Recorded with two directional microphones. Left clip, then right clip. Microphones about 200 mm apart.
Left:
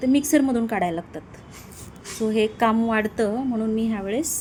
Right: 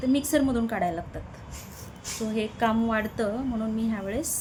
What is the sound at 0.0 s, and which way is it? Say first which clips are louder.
A woman's voice: left 4 dB; 20° left (ahead or behind).